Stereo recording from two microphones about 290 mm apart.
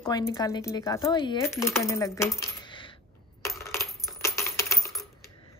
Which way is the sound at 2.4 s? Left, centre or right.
Centre.